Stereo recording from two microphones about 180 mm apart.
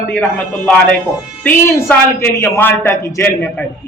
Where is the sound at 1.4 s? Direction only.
15° left (ahead or behind).